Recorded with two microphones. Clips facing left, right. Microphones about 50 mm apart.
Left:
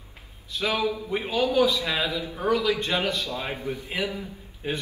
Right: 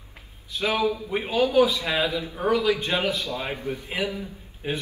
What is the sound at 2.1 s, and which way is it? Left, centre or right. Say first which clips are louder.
Speech: right 1 dB; right.